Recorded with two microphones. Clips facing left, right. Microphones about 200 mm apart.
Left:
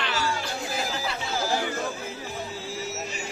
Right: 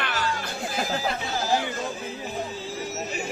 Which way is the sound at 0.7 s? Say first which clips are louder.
Right 5 dB; 50° right (ahead or behind).